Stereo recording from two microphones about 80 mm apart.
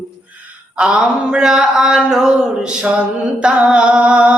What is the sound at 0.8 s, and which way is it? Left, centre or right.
Mantra, centre.